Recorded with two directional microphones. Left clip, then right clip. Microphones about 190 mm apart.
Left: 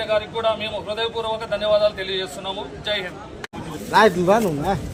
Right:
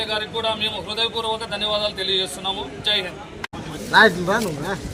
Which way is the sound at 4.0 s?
55° left (ahead or behind).